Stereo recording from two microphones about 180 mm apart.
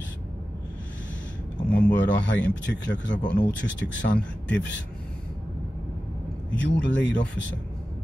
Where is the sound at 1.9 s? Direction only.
90° left.